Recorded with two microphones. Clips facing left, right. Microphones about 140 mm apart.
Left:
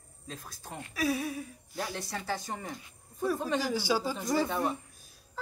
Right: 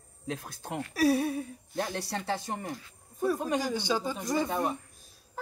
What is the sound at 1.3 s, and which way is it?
Speech, 50° right (ahead or behind).